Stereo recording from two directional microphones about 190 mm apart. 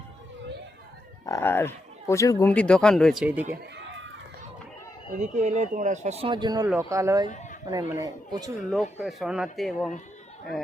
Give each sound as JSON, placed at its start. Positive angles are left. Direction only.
{"t": 1.2, "sound": "speech", "side_deg": 15}
{"t": 5.2, "sound": "speech", "side_deg": -40}
{"t": 6.2, "sound": "speech", "side_deg": -25}
{"t": 9.0, "sound": "speech", "side_deg": 0}